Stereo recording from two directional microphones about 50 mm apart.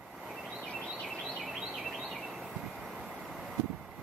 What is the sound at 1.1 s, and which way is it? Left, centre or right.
Bird, centre.